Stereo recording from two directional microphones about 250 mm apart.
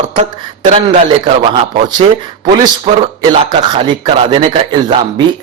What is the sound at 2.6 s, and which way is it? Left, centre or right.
Speech, right.